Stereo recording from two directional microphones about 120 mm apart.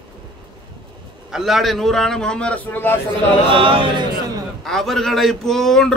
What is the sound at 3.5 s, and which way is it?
Chant, 45° right (ahead or behind).